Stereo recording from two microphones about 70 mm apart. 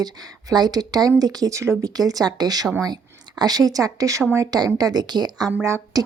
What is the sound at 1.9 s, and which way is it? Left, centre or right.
Speech, right.